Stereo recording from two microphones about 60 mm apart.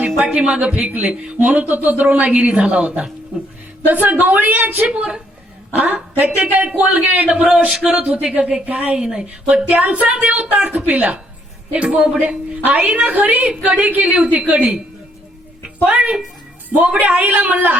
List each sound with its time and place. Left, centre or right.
0.2 s speech: centre
3.8 s speech: right
8.9 s a woman's voice: centre
9.7 s speech: right
15.9 s a woman's voice: centre